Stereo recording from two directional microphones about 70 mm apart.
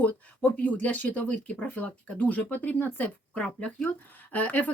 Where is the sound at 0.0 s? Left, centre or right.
Left.